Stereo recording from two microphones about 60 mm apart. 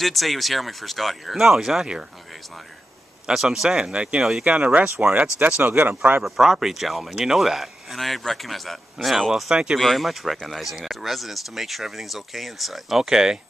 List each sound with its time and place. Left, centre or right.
0.0 s speech: centre
3.3 s speech: centre
5.6 s speech: right
6.2 s speech: centre
9.3 s speech: centre
9.8 s speech: centre